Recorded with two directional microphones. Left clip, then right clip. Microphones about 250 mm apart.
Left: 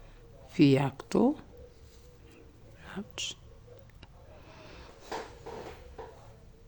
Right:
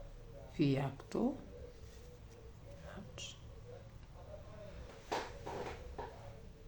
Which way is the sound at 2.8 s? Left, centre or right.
Left.